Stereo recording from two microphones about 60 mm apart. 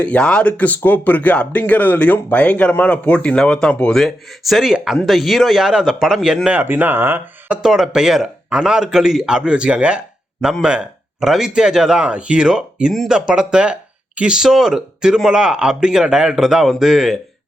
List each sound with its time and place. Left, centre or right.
0.0 s speech: centre
3.9 s speech: centre
6.5 s speech: right
7.6 s a man's voice: centre